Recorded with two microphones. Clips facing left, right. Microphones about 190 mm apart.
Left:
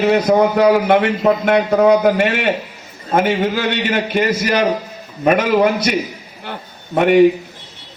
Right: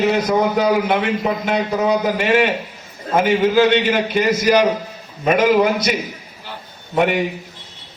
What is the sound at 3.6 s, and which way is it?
Speech, 55° left (ahead or behind).